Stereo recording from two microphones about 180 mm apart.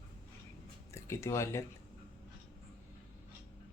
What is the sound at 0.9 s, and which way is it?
Speech, 15° left (ahead or behind).